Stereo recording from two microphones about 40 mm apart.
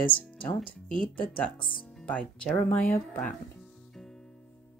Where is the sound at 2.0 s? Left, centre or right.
Left.